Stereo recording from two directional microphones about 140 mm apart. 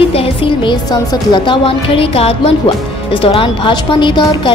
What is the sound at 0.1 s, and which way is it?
Speech, 40° left (ahead or behind).